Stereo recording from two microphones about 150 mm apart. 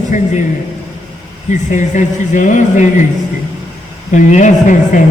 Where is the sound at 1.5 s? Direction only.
55° left (ahead or behind).